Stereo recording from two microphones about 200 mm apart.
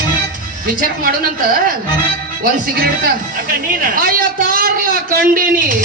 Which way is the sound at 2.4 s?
45° right (ahead or behind).